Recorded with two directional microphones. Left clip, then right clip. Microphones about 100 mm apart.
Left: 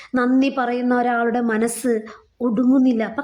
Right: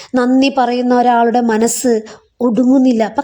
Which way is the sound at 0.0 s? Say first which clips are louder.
Right 6 dB; 50° right (ahead or behind).